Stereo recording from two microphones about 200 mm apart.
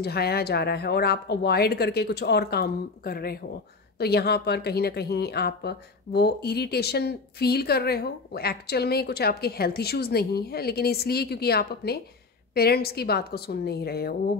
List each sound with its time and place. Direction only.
0.0 s speech: 50° left (ahead or behind)